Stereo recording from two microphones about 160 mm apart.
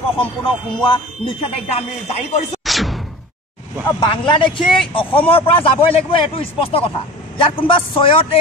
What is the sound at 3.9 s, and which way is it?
A man's voice, 30° left (ahead or behind).